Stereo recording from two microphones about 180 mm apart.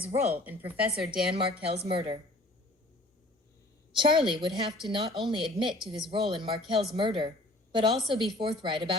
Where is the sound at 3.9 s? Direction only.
25° right (ahead or behind).